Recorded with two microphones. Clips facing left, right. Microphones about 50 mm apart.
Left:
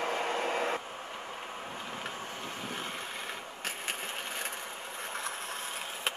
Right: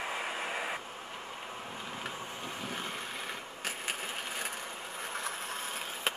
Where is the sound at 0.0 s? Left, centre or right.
Left.